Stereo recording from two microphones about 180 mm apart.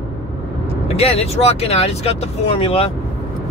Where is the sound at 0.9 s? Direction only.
35° left (ahead or behind).